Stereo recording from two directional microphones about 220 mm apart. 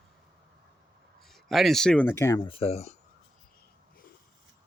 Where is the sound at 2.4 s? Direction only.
25° left (ahead or behind).